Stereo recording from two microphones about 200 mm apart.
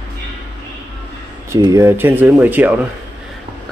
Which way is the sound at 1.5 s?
15° right (ahead or behind).